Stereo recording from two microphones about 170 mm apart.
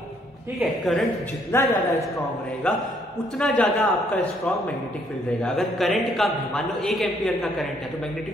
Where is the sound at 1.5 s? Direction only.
10° left (ahead or behind).